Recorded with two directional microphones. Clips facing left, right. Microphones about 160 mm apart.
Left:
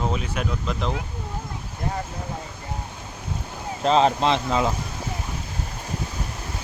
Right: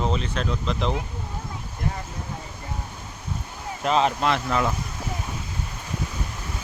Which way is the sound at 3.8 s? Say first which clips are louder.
Left 3 dB; 30° left (ahead or behind).